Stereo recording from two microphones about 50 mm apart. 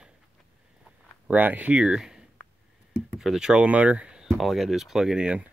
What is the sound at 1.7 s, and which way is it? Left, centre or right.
Speech, centre.